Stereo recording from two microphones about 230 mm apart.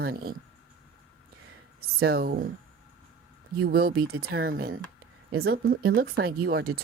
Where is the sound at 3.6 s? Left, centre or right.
Right.